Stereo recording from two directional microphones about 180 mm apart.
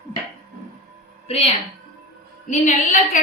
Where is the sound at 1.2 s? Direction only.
35° left (ahead or behind).